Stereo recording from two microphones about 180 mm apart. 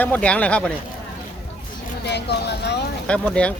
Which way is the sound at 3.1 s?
5° left (ahead or behind).